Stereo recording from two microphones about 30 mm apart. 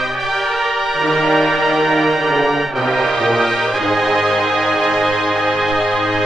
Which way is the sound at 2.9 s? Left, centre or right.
Left.